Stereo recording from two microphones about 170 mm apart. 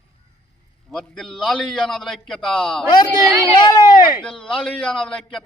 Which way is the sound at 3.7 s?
25° left (ahead or behind).